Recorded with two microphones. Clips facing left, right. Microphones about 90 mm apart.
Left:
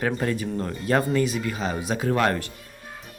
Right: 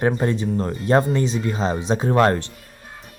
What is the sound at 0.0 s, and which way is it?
Speech, 25° right (ahead or behind).